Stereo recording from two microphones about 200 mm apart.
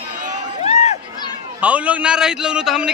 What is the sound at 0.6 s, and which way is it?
Run, 35° left (ahead or behind).